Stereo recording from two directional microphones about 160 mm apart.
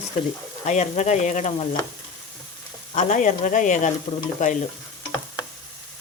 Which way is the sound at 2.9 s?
50° left (ahead or behind).